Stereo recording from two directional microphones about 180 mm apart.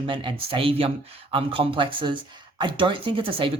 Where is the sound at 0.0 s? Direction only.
30° right (ahead or behind).